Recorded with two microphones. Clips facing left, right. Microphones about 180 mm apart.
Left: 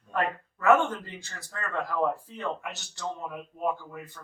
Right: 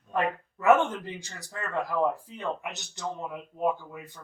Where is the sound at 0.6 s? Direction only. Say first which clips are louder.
Right 1 dB; 20° right (ahead or behind).